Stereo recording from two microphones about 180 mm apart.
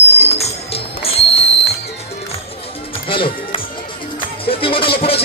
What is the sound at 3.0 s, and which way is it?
Music, 30° left (ahead or behind).